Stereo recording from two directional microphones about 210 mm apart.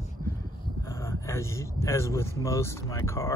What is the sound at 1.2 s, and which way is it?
Speech, 15° left (ahead or behind).